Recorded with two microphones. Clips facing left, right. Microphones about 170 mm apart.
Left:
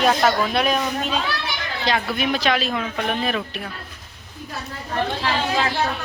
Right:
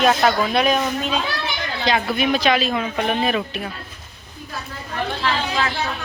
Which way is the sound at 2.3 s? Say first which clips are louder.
Right 3 dB; centre (ahead or behind).